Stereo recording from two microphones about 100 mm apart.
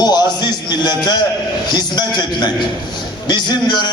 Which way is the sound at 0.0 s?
45° left (ahead or behind).